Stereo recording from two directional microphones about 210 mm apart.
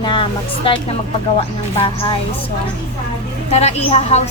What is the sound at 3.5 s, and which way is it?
Speech, 30° left (ahead or behind).